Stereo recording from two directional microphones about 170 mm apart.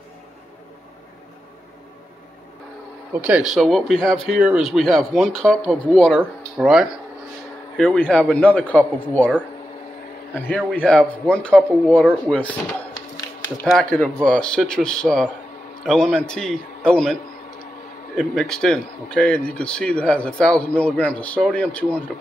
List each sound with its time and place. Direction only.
3.2 s speech: 10° right (ahead or behind); by 9.3 s 10° left (ahead or behind)
10.3 s speech: 10° left (ahead or behind)
13.7 s speech: 5° left (ahead or behind)